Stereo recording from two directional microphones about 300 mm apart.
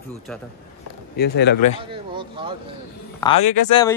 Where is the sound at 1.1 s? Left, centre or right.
Left.